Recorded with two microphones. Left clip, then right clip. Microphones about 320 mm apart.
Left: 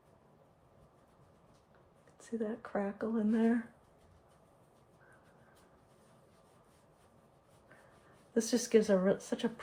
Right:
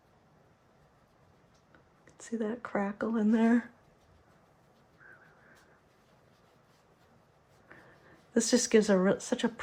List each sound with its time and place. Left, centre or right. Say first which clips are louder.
2.1 s speech: right 3 dB; right
8.3 s speech: right 4 dB; right